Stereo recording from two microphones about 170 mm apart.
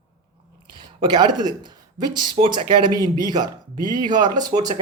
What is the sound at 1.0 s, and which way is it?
Speech, 25° right (ahead or behind).